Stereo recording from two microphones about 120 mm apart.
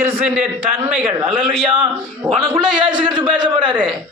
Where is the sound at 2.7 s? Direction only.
40° right (ahead or behind).